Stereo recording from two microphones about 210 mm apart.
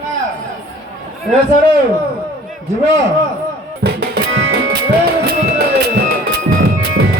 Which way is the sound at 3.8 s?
50° right (ahead or behind).